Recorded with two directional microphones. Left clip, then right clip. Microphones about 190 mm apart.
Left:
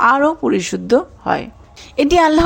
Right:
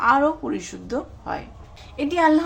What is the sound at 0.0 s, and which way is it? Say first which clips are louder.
Speech: left 6 dB; 35° left (ahead or behind).